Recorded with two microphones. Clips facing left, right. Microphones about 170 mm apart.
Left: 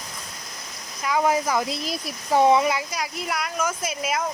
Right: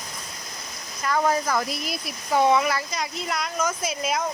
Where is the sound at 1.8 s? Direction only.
35° left (ahead or behind).